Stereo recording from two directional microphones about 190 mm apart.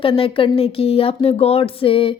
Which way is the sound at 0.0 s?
30° left (ahead or behind).